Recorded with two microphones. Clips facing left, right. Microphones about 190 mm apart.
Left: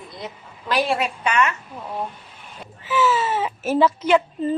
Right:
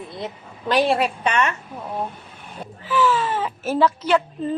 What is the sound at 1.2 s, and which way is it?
Speech, 35° right (ahead or behind).